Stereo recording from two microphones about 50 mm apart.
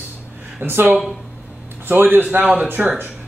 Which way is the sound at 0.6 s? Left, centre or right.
Right.